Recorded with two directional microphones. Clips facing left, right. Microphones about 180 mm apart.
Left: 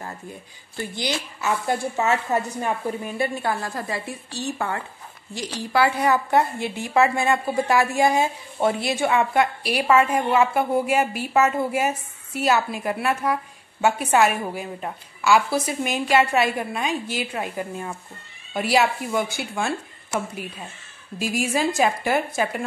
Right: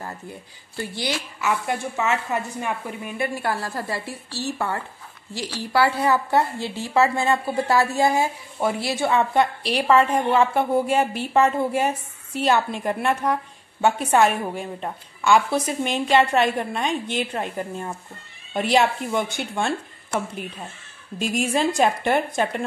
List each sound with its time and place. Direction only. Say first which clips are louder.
0.7 s a woman's voice: even; 20° left (ahead or behind)
1.4 s a woman's voice: left 1 dB; 30° left (ahead or behind)
3.4 s a woman's voice: even; 20° left (ahead or behind)